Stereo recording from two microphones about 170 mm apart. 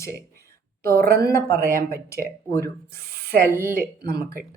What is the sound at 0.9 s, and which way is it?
Speech, 65° right (ahead or behind).